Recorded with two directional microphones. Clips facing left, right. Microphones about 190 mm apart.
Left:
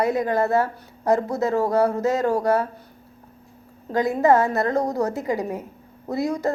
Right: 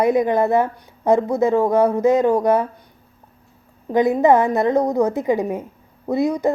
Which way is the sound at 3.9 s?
20° right (ahead or behind).